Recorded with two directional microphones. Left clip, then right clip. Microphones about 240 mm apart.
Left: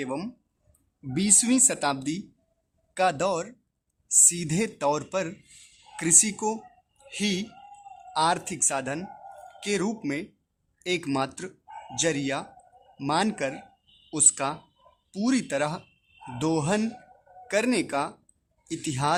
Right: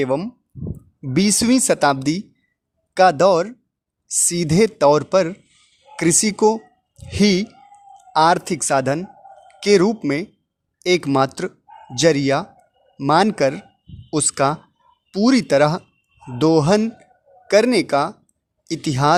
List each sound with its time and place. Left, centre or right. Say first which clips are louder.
0.0 s speech: right 12 dB; right